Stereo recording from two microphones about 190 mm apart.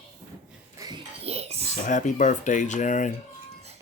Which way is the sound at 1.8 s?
40° left (ahead or behind).